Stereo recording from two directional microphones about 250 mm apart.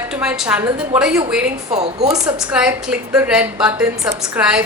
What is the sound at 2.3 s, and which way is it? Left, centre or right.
A woman's voice, centre.